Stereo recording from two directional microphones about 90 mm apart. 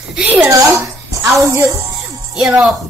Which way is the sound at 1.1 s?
40° right (ahead or behind).